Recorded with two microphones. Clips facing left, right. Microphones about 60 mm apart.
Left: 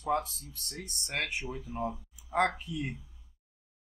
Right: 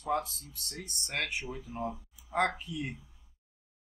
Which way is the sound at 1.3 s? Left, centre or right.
Centre.